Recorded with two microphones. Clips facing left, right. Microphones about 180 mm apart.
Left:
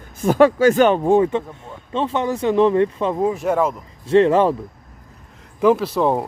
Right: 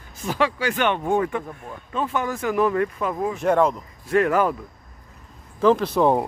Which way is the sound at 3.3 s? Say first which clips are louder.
Even; 5° left (ahead or behind).